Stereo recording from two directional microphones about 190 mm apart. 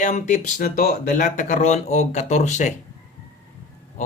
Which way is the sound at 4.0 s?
40° left (ahead or behind).